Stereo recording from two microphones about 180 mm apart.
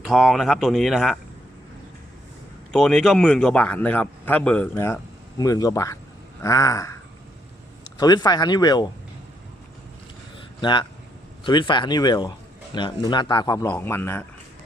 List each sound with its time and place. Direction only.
0.0 s speech: centre (ahead or behind)
2.7 s a man's voice: centre (ahead or behind); by 6.9 s 20° left (ahead or behind)
7.9 s a man's voice: 20° left (ahead or behind)
10.6 s a man's voice: 25° left (ahead or behind)